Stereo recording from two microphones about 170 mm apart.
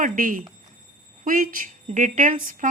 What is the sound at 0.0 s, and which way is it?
A woman's voice, 50° right (ahead or behind).